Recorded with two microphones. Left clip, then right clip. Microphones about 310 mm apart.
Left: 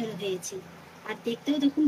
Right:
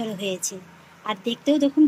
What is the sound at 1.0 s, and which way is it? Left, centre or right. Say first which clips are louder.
Speech: right 7 dB; centre.